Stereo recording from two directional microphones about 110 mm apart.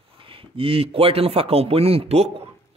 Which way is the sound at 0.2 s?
55° right (ahead or behind).